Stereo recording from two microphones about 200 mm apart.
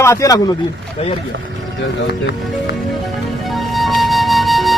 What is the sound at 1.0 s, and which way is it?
Speech, 30° left (ahead or behind).